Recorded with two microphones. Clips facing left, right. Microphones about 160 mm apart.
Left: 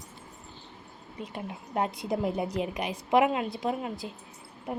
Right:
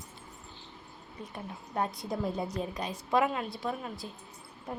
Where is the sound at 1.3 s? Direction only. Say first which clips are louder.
Left 3 dB; 20° left (ahead or behind).